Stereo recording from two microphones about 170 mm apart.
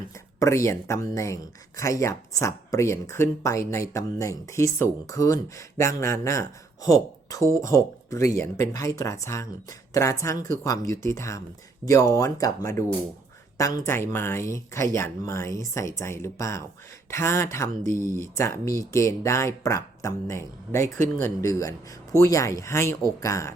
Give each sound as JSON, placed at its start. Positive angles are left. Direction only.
{"t": 0.3, "sound": "speech", "side_deg": 15}
{"t": 13.6, "sound": "speech", "side_deg": 20}